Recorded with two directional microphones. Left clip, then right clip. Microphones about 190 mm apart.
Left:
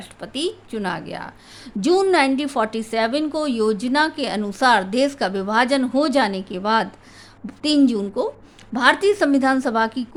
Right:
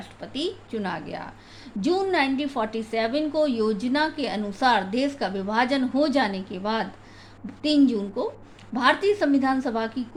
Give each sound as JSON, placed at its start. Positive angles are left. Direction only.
{"t": 0.0, "sound": "a woman's voice", "side_deg": 40}